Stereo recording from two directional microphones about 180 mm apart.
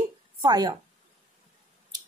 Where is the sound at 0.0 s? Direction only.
25° right (ahead or behind).